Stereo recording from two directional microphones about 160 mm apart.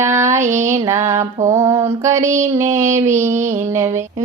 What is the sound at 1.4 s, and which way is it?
Child singing, 20° right (ahead or behind).